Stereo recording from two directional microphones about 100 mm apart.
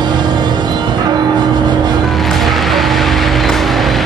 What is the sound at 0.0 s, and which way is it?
Music, 45° right (ahead or behind).